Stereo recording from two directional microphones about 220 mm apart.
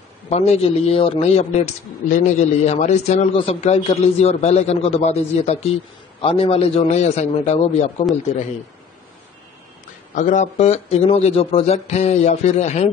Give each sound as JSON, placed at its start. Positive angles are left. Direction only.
{"t": 0.3, "sound": "a man's voice", "side_deg": 30}
{"t": 10.1, "sound": "speech", "side_deg": 35}